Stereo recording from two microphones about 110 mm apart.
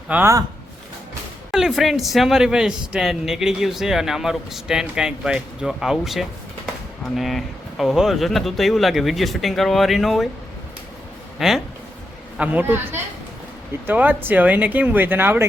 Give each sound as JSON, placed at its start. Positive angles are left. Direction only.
{"t": 0.1, "sound": "speech", "side_deg": -15}
{"t": 1.5, "sound": "a man's voice", "side_deg": 0}
{"t": 11.3, "sound": "speech", "side_deg": -5}
{"t": 12.4, "sound": "speech", "side_deg": -15}